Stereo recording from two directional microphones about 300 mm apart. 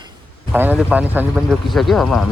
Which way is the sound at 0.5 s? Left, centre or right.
Centre.